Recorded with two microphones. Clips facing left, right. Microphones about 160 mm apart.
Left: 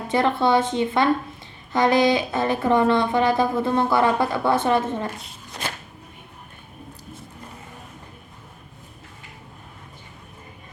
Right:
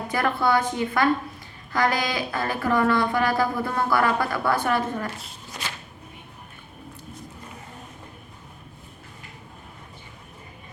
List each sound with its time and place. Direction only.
0.1 s speech: 25° left (ahead or behind)